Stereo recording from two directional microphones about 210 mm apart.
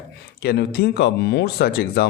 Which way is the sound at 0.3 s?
50° left (ahead or behind).